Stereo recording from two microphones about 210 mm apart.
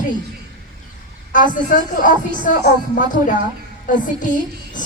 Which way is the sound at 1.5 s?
40° left (ahead or behind).